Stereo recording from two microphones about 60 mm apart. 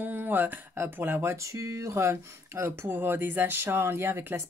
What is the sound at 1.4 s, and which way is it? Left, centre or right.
Speech, right.